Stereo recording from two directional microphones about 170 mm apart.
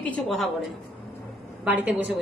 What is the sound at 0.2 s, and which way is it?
A woman's voice, centre (ahead or behind).